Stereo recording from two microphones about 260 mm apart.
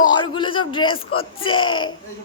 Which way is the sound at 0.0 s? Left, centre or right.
Centre.